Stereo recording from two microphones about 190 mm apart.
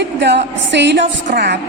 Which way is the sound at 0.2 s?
65° right (ahead or behind).